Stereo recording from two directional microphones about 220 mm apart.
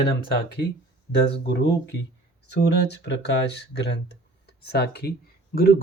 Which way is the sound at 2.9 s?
50° left (ahead or behind).